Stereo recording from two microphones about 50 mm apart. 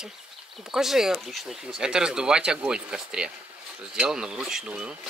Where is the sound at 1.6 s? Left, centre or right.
Centre.